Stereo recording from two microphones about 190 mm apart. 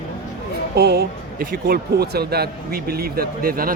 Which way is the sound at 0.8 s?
55° right (ahead or behind).